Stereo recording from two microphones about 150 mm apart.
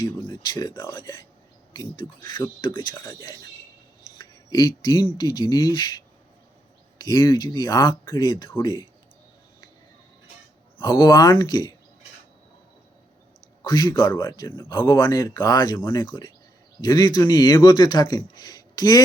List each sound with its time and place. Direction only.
0.0 s speech: 30° left (ahead or behind)
7.0 s speech: 25° left (ahead or behind)
10.8 s speech: 30° left (ahead or behind)
13.7 s speech: 25° left (ahead or behind)
14.5 s speech: 15° left (ahead or behind)